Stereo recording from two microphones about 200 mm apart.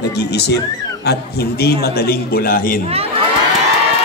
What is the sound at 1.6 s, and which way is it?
A man's voice, 50° left (ahead or behind).